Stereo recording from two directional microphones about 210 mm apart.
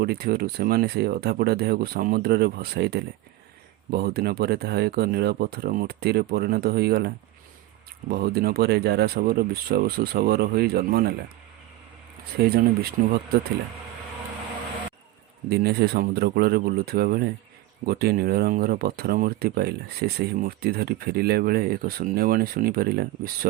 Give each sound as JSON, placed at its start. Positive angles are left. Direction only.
{"t": 0.0, "sound": "speech", "side_deg": -50}
{"t": 8.1, "sound": "speech", "side_deg": -50}
{"t": 12.4, "sound": "speech", "side_deg": -45}
{"t": 15.4, "sound": "speech", "side_deg": -50}